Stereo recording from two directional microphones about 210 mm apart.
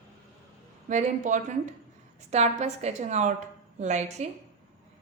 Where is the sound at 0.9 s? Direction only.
35° right (ahead or behind).